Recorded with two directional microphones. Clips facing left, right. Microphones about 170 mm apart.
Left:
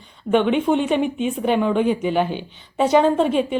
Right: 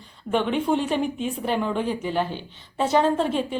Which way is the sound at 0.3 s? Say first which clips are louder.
Left 5 dB; 75° left (ahead or behind).